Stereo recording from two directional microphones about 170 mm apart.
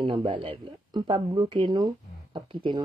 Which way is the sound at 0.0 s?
30° right (ahead or behind).